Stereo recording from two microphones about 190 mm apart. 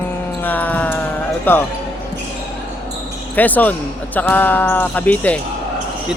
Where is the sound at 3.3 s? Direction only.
10° left (ahead or behind).